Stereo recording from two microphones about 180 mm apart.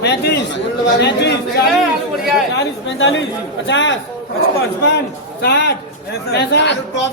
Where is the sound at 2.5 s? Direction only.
90° left.